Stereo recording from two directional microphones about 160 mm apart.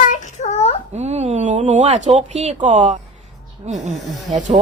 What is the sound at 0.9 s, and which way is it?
Speech, 45° right (ahead or behind).